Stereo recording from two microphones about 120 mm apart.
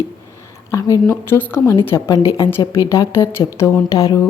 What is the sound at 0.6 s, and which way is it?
A woman's voice, 25° left (ahead or behind).